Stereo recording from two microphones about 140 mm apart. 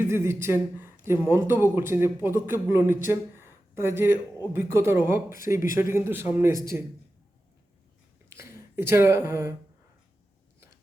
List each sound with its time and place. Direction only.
0.0 s speech: 20° right (ahead or behind)
8.4 s speech: 20° right (ahead or behind)